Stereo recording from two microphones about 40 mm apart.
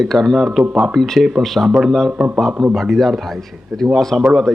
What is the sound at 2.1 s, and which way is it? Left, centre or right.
Speech, right.